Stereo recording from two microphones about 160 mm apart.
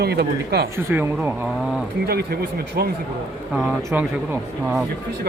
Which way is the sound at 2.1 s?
75° right (ahead or behind).